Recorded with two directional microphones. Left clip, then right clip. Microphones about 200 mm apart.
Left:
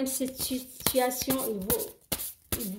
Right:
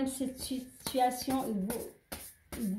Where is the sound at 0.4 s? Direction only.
40° left (ahead or behind).